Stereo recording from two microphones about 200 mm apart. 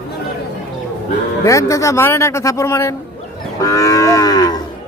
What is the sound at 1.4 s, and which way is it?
A man's voice, 15° left (ahead or behind).